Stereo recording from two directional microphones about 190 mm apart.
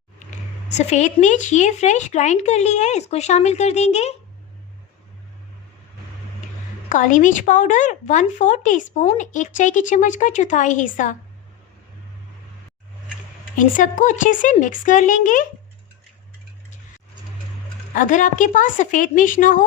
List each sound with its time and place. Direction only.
0.8 s speech: 35° left (ahead or behind)
6.9 s speech: 40° left (ahead or behind)
13.6 s speech: 45° left (ahead or behind)
17.9 s speech: 40° left (ahead or behind)